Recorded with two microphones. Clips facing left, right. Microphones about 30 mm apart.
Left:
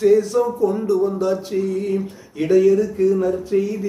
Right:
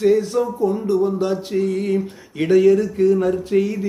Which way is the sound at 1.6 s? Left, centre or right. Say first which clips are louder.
Right 1 dB; right.